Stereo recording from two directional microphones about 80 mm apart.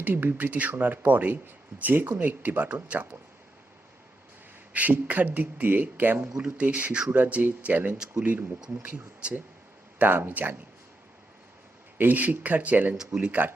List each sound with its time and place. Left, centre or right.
0.0 s speech: right
4.7 s speech: right
11.9 s speech: right